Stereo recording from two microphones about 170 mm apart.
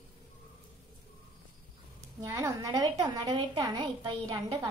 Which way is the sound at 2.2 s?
20° right (ahead or behind).